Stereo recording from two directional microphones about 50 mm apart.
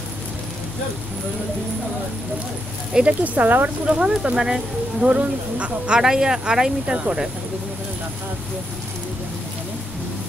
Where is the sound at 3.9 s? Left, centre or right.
Centre.